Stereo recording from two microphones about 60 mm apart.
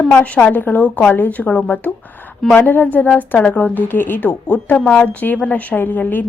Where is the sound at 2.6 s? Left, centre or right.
Left.